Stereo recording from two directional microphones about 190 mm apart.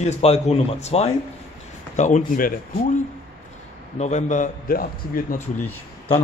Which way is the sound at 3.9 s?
40° left (ahead or behind).